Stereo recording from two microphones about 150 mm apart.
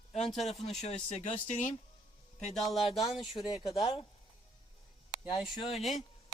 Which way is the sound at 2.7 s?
Centre (ahead or behind).